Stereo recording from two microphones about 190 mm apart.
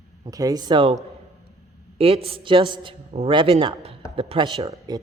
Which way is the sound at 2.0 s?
30° right (ahead or behind).